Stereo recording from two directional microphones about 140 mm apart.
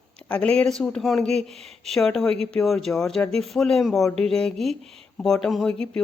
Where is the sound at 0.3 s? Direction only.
5° left (ahead or behind).